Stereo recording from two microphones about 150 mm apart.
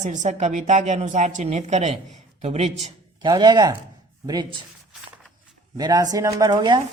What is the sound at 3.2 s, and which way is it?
Speech, 25° right (ahead or behind).